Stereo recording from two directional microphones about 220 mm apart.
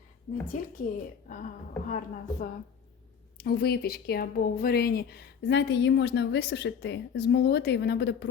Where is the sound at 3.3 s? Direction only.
45° left (ahead or behind).